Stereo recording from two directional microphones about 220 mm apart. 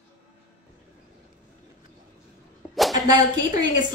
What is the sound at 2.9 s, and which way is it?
Speech, 20° right (ahead or behind).